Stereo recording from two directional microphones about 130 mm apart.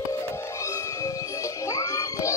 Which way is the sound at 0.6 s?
25° left (ahead or behind).